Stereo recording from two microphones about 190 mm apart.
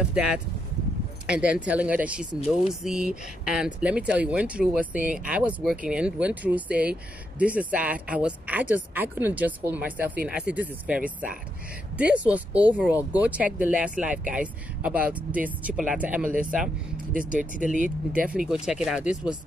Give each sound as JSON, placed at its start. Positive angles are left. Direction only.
{"t": 0.1, "sound": "speech", "side_deg": -5}
{"t": 17.7, "sound": "speech", "side_deg": -45}
{"t": 18.2, "sound": "speech", "side_deg": -5}